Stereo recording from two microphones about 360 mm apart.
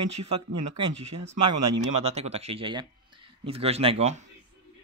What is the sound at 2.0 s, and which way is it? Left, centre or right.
Speech, centre.